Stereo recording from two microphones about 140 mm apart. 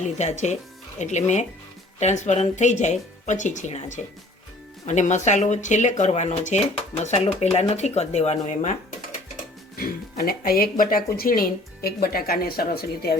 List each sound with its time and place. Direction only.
0.2 s speech: 55° left (ahead or behind)
9.7 s speech: 90° left